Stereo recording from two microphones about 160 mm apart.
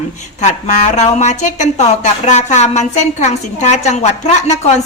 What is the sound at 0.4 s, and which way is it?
A woman's voice, 45° left (ahead or behind).